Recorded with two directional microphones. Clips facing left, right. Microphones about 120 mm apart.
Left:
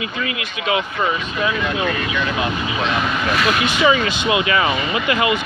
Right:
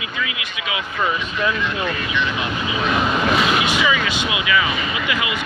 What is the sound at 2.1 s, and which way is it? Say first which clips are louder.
Speech: left 2 dB; 45° left (ahead or behind).